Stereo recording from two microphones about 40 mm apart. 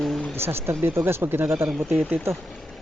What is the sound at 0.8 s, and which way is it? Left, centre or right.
Speech, right.